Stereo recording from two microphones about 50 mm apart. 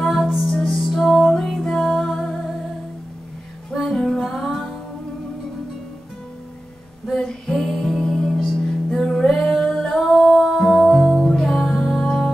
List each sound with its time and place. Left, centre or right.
0.0 s music: centre
1.1 s music: centre
3.9 s music: centre
7.2 s music: centre
7.6 s music: centre
8.0 s music: centre
9.8 s singing: centre
10.4 s music: centre